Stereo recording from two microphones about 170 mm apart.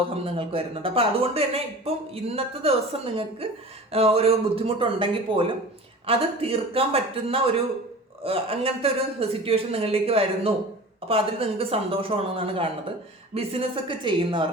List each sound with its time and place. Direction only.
0.3 s a man's voice: 35° right (ahead or behind)